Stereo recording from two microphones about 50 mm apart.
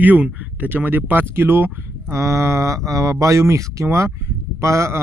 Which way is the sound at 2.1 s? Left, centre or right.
Right.